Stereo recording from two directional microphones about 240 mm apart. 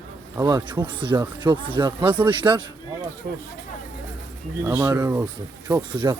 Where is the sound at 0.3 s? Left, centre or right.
Centre.